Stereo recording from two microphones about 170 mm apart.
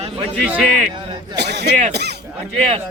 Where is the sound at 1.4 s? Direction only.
80° right.